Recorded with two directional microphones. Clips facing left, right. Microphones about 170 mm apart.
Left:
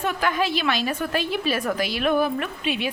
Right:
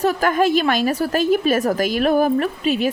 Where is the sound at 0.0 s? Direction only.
40° right (ahead or behind).